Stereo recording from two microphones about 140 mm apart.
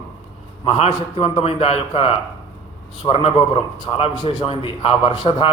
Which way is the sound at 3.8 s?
45° left (ahead or behind).